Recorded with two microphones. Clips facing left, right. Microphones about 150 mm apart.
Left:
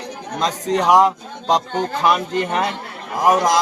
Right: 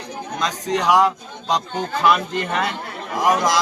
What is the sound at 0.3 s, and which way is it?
A man's voice, 30° left (ahead or behind).